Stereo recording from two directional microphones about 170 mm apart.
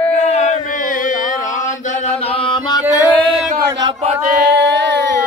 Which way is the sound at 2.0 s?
30° left (ahead or behind).